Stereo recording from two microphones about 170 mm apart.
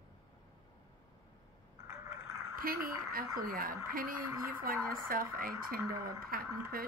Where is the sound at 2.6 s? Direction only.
55° right (ahead or behind).